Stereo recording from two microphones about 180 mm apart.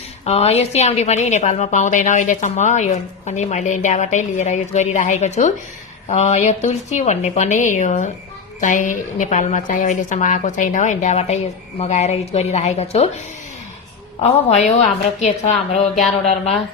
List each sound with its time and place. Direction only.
0.3 s a woman's voice: 35° left (ahead or behind)
14.2 s a woman's voice: 35° left (ahead or behind)
16.0 s speech: centre (ahead or behind)